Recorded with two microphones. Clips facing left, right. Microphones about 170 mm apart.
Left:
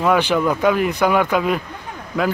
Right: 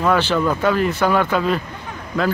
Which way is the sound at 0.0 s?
15° left (ahead or behind).